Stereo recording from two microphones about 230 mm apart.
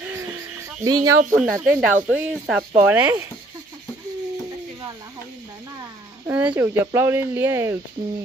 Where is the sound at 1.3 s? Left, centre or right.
Centre.